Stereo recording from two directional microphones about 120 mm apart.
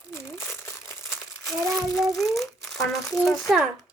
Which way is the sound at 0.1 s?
20° left (ahead or behind).